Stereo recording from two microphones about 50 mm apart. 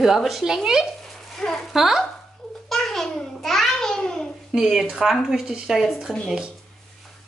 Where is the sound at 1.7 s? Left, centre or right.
Centre.